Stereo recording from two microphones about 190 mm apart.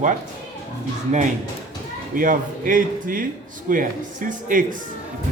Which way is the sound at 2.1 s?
45° right (ahead or behind).